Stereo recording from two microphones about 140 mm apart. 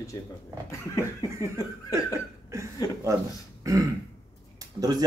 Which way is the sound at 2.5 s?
20° right (ahead or behind).